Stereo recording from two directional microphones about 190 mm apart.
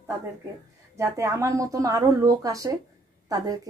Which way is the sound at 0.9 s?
15° right (ahead or behind).